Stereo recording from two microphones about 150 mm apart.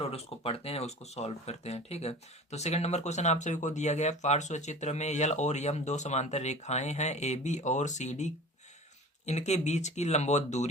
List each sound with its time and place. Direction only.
0.0 s speech: 40° left (ahead or behind)